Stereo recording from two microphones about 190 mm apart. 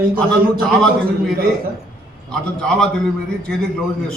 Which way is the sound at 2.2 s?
5° left (ahead or behind).